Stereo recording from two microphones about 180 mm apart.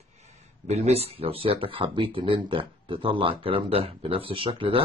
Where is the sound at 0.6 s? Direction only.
35° right (ahead or behind).